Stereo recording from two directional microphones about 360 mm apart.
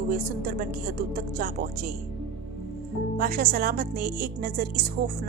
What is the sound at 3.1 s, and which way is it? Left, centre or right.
Speech, right.